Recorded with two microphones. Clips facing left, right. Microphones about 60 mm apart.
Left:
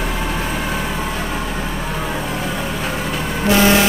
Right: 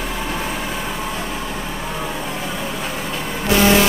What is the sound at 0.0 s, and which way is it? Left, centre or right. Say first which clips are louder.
Vehicle: left 2 dB; centre.